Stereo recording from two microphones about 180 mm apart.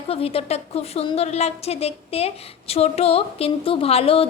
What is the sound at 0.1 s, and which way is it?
A woman's voice, 35° left (ahead or behind).